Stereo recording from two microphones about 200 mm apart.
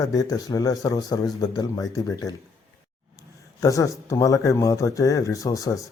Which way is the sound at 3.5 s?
15° left (ahead or behind).